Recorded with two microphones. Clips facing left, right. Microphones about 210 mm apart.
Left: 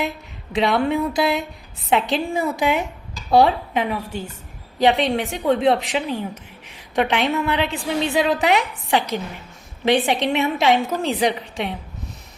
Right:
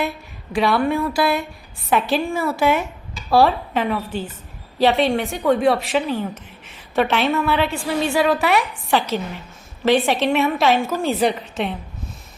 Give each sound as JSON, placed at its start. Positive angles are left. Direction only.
{"t": 0.5, "sound": "a woman's voice", "side_deg": 20}